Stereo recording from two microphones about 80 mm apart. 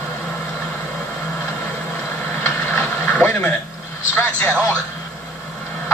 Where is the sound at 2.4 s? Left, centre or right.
Left.